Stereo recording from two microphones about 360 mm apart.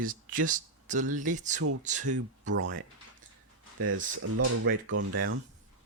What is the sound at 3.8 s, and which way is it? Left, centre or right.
Speech, right.